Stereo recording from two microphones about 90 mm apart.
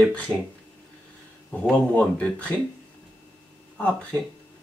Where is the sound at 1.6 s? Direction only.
10° left (ahead or behind).